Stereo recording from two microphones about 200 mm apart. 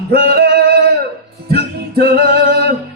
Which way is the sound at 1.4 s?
50° right (ahead or behind).